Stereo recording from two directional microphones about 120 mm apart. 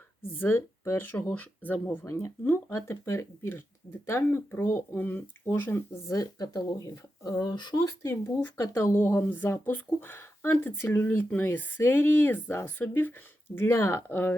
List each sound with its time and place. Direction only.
0.2 s speech: 20° left (ahead or behind); by 7.9 s 40° left (ahead or behind)
8.0 s speech: 20° left (ahead or behind)